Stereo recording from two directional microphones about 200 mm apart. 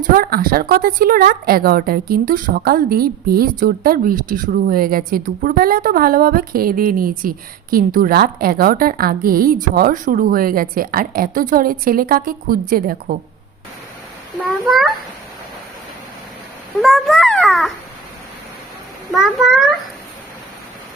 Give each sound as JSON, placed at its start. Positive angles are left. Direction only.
{"t": 0.0, "sound": "a woman's voice", "side_deg": -45}
{"t": 14.4, "sound": "a child's voice", "side_deg": 0}
{"t": 16.8, "sound": "a child's voice", "side_deg": 0}
{"t": 19.1, "sound": "a child's voice", "side_deg": 0}